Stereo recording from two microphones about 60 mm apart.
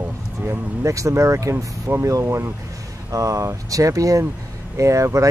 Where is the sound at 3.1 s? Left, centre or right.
Right.